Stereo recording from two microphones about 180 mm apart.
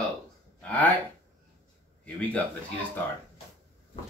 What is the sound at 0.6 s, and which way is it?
Speech, 10° left (ahead or behind).